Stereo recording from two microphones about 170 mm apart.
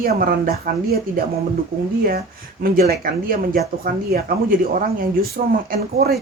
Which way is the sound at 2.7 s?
60° right (ahead or behind).